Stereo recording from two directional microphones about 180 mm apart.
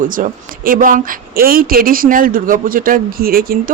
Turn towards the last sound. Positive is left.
turn(degrees=-55)  # may be behind; listen again after turning